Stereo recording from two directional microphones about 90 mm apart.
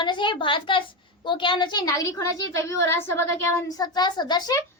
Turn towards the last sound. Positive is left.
turn(degrees=55)  # may be behind; listen again after turning